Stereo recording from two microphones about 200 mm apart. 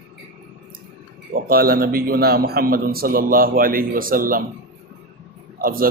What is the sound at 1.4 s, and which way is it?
A man's voice, 50° right (ahead or behind).